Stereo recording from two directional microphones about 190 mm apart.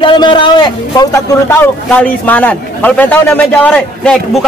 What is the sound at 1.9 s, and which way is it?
A man's voice, 10° left (ahead or behind).